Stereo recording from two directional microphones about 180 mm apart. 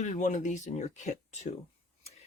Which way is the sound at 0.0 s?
45° left (ahead or behind).